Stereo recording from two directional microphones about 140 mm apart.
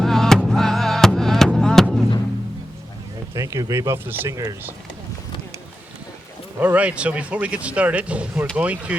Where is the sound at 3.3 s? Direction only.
25° right (ahead or behind).